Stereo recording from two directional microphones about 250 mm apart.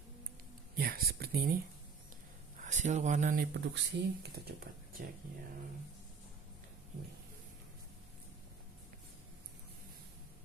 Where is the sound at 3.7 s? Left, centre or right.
Right.